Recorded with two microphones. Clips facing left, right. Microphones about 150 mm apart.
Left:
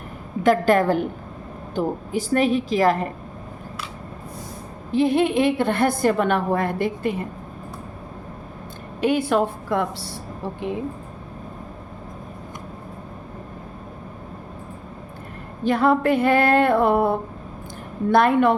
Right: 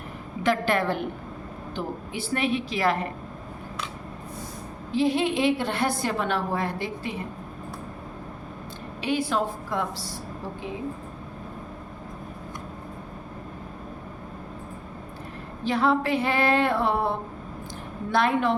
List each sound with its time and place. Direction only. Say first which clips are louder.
0.4 s a woman's voice: left 7 dB; 45° left (ahead or behind)
4.9 s a woman's voice: left 4 dB; 55° left (ahead or behind)
9.0 s a woman's voice: left 6 dB; 55° left (ahead or behind)
15.6 s a woman's voice: left 5 dB; 55° left (ahead or behind)